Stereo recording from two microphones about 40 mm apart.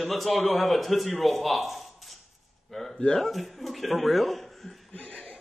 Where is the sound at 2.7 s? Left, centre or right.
Centre.